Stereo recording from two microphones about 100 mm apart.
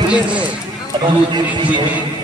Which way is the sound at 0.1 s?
10° right (ahead or behind).